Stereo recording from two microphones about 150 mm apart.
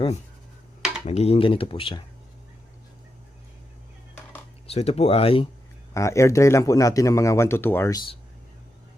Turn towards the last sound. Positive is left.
turn(degrees=15)  # may be behind; listen again after turning